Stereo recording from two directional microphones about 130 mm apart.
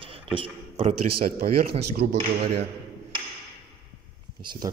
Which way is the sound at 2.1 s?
50° right (ahead or behind).